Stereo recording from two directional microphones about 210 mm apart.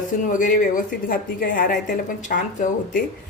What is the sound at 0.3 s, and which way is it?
A woman's voice, 40° left (ahead or behind).